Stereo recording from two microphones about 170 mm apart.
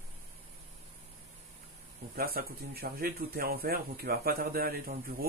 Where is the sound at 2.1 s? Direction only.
65° right (ahead or behind).